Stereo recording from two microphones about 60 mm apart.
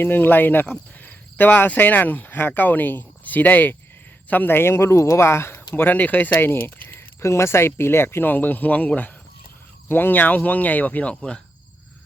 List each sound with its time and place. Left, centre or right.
0.0 s speech: left
6.6 s keys jangling: left
7.3 s speech: left; by 11.3 s centre